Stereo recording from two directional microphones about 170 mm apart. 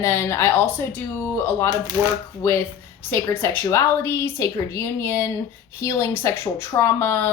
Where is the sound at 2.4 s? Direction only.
15° left (ahead or behind).